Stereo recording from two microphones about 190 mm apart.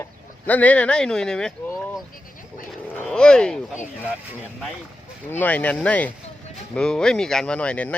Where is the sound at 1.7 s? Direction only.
Centre (ahead or behind).